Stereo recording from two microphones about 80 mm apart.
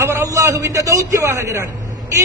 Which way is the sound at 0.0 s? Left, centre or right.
Right.